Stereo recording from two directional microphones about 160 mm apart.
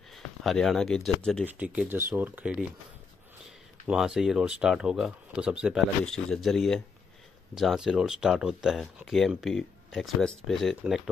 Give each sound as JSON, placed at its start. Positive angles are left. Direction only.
{"t": 0.1, "sound": "speech", "side_deg": 0}
{"t": 1.4, "sound": "speech", "side_deg": -10}
{"t": 3.8, "sound": "speech", "side_deg": -5}